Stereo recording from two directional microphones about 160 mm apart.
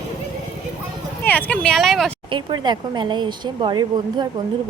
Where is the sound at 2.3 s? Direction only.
30° right (ahead or behind).